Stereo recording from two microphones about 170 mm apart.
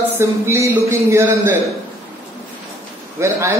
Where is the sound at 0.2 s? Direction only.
15° right (ahead or behind).